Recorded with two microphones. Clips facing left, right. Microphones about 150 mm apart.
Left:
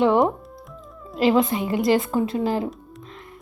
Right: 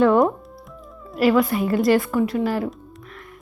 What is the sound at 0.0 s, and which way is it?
Speech, 20° left (ahead or behind).